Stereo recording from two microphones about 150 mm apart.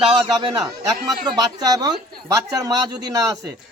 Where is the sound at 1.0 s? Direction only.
25° right (ahead or behind).